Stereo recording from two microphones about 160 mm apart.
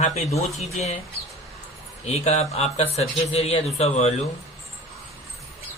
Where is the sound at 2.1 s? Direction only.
45° left (ahead or behind).